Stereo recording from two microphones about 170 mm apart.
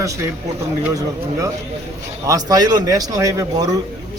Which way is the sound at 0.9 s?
20° right (ahead or behind).